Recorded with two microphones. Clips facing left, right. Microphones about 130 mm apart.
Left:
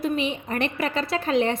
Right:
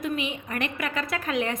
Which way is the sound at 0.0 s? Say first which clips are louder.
Left 4 dB; 30° left (ahead or behind).